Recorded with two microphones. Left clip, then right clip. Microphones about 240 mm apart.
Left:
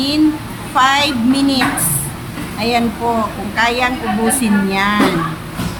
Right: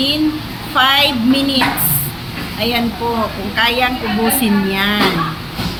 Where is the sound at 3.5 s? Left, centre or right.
Centre.